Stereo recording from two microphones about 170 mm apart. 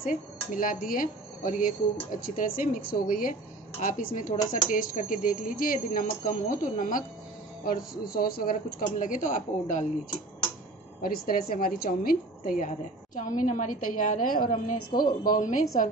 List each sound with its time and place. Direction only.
0.0 s a woman's voice: 55° left (ahead or behind)
11.0 s a woman's voice: 60° left (ahead or behind)